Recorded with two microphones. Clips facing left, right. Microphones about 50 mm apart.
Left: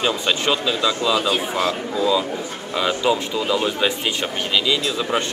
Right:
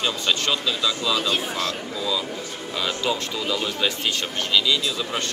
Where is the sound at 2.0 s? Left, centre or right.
Centre.